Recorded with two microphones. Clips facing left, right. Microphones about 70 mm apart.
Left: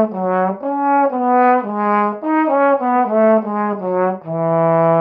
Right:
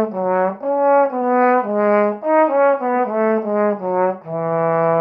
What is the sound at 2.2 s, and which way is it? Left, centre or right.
Brass instrument, centre.